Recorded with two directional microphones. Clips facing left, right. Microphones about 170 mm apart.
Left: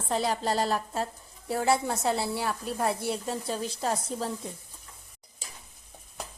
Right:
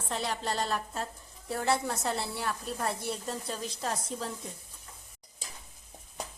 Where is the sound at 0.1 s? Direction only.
40° left (ahead or behind).